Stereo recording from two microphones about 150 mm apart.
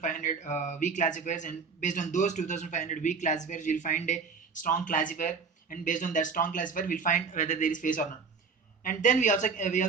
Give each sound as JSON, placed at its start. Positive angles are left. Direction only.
{"t": 0.0, "sound": "a man's voice", "side_deg": 60}